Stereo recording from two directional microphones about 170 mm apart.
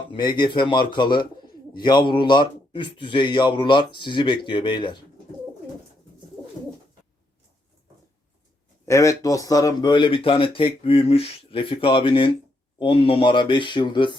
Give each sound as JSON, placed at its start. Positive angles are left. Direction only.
{"t": 0.1, "sound": "speech", "side_deg": 25}
{"t": 8.9, "sound": "speech", "side_deg": 20}